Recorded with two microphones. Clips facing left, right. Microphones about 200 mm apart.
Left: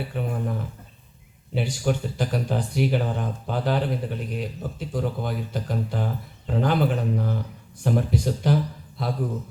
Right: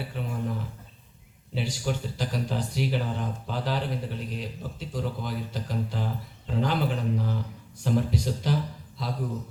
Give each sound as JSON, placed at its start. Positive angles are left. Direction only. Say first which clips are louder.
{"t": 0.1, "sound": "speech", "louder": "left 4 dB", "side_deg": 55}
{"t": 1.5, "sound": "speech", "louder": "left 5 dB", "side_deg": 55}